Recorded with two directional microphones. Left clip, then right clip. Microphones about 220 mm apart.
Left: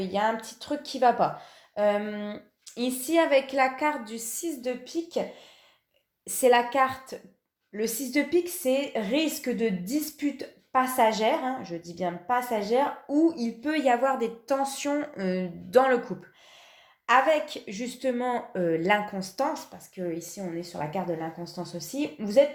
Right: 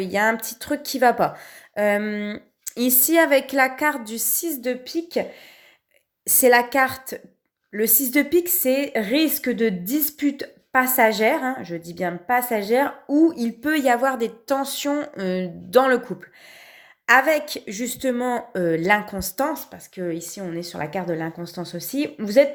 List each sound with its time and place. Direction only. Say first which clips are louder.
0.0 s speech: right 6 dB; 40° right (ahead or behind)
6.2 s speech: right 5 dB; 35° right (ahead or behind)
17.1 s speech: right 5 dB; 35° right (ahead or behind)